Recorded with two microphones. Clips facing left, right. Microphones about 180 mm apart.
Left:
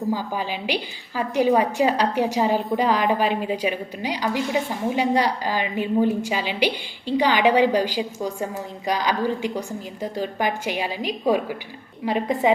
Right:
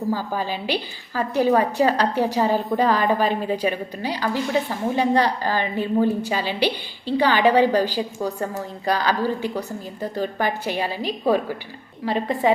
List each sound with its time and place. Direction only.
0.1 s a woman's voice: 15° left (ahead or behind)